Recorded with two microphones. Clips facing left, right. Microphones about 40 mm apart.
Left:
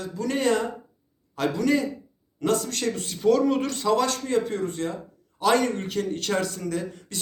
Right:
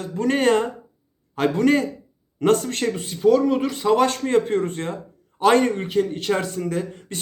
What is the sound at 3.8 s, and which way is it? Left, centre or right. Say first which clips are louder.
A man's voice: right 5 dB; right.